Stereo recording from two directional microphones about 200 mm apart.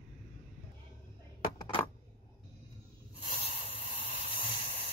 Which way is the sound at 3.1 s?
30° left (ahead or behind).